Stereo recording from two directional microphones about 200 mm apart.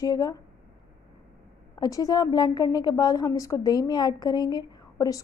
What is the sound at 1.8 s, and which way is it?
A woman's voice, 20° left (ahead or behind).